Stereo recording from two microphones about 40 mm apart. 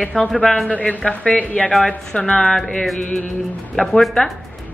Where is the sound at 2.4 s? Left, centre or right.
Centre.